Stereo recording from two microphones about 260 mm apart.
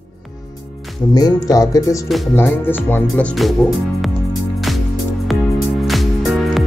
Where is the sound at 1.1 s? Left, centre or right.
Centre.